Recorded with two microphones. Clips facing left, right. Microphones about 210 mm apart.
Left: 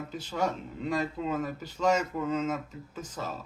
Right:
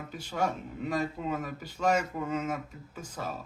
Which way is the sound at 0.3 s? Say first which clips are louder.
Even; 10° right (ahead or behind).